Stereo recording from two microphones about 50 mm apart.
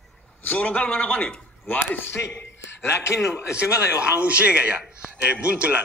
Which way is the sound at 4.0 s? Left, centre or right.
Right.